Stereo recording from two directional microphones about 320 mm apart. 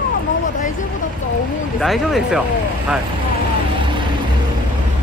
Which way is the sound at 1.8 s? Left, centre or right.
Centre.